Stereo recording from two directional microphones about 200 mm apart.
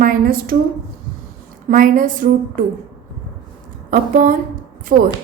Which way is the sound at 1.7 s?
45° right (ahead or behind).